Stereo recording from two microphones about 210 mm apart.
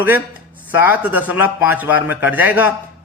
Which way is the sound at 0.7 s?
10° right (ahead or behind).